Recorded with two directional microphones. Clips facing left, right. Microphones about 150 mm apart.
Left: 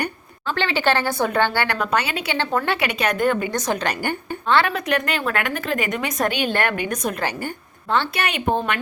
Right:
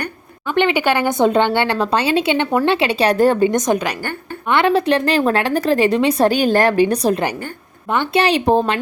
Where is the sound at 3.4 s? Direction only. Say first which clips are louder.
Right 6 dB; 20° right (ahead or behind).